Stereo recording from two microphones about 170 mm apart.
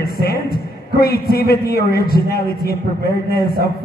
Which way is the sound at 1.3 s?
65° left (ahead or behind).